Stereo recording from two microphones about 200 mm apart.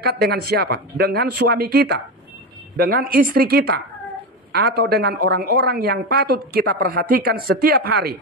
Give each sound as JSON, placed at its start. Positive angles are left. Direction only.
{"t": 0.0, "sound": "a woman's voice", "side_deg": -50}